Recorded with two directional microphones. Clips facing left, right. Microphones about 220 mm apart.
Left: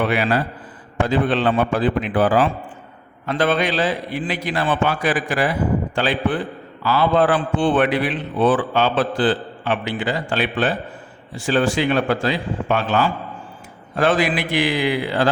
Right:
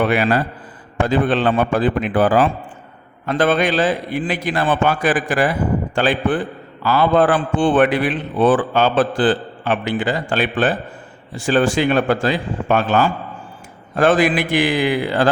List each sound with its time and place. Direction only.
0.1 s a man's voice: 50° right (ahead or behind)